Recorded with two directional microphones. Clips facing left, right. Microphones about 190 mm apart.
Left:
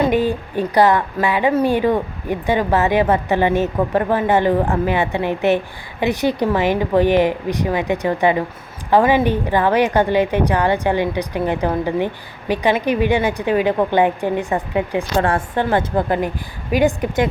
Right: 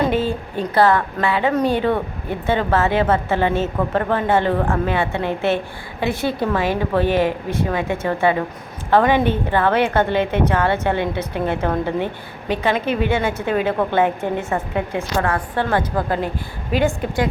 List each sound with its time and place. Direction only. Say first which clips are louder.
0.1 s a woman's voice: left 3 dB; 15° left (ahead or behind)
15.2 s a woman's voice: left 3 dB; 30° left (ahead or behind)
15.5 s a woman's voice: left 2 dB; 15° left (ahead or behind)